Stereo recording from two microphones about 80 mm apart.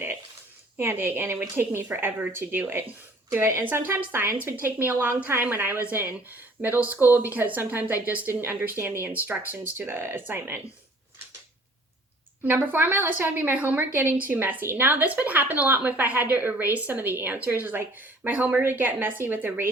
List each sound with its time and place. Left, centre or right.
0.8 s a woman's voice: right
12.4 s a woman's voice: right